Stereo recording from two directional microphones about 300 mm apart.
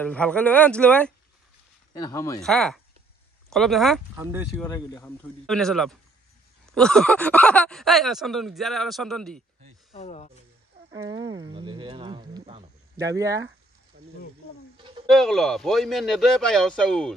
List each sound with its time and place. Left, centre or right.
0.0 s speech: centre
4.6 s speech: centre
9.9 s speech: left
11.1 s speech: centre
13.9 s snake: right
15.0 s speech: centre